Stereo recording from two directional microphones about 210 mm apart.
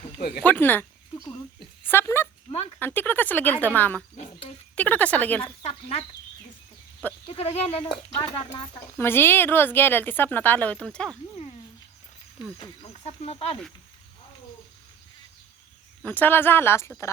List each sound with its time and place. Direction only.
0.2 s speech: 50° left (ahead or behind)
0.4 s speech: 10° left (ahead or behind)
2.5 s speech: 30° left (ahead or behind)
2.7 s speech: 10° left (ahead or behind)
5.4 s speech: 30° left (ahead or behind)
7.3 s speech: 30° left (ahead or behind); by 11.2 s 5° left (ahead or behind)
13.1 s speech: 30° left (ahead or behind)
16.0 s speech: 10° left (ahead or behind)